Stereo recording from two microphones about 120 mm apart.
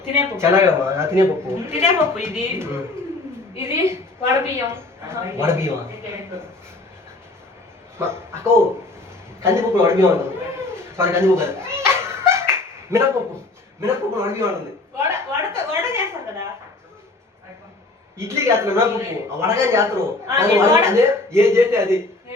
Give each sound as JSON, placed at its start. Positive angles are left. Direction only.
{"t": 0.2, "sound": "a man's voice", "side_deg": -20}
{"t": 7.9, "sound": "a man's voice", "side_deg": -20}
{"t": 11.7, "sound": "cat", "side_deg": -20}
{"t": 13.8, "sound": "a man's voice", "side_deg": -20}
{"t": 18.2, "sound": "a man's voice", "side_deg": -20}